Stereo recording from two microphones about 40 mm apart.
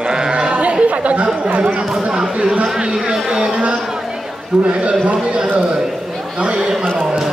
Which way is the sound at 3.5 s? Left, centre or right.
Right.